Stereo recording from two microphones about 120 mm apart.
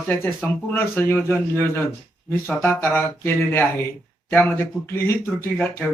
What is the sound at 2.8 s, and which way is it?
Speech, 20° left (ahead or behind).